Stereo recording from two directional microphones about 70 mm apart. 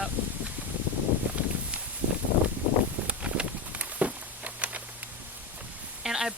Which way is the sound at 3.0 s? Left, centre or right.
Centre.